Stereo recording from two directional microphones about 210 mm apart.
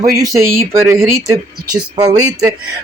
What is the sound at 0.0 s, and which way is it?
Speech, 15° right (ahead or behind).